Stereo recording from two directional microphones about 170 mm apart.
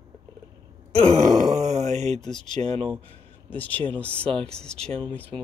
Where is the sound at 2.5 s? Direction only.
40° right (ahead or behind).